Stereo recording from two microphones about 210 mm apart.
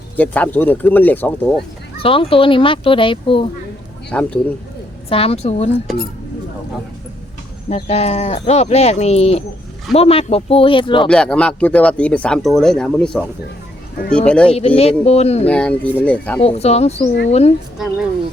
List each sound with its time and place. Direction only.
0.2 s speech: 10° left (ahead or behind)
2.0 s speech: 25° left (ahead or behind)
4.1 s speech: 5° left (ahead or behind)
5.0 s speech: 25° left (ahead or behind)
7.7 s speech: 30° left (ahead or behind)
11.1 s speech: 5° left (ahead or behind)
14.8 s speech: 30° left (ahead or behind)
15.4 s speech: 5° left (ahead or behind)
16.4 s speech: 30° left (ahead or behind)